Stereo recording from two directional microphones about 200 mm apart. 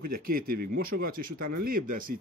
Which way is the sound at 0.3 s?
45° right (ahead or behind).